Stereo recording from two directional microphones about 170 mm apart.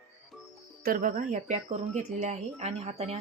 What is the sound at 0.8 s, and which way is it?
Speech, 55° right (ahead or behind).